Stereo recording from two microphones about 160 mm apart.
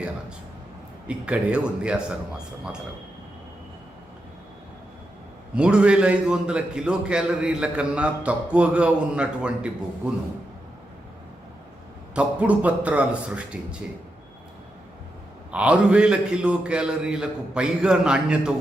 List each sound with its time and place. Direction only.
1.0 s a man's voice: 5° right (ahead or behind)
5.5 s a man's voice: 5° right (ahead or behind)
12.1 s a man's voice: 10° right (ahead or behind)
15.5 s a man's voice: 10° right (ahead or behind)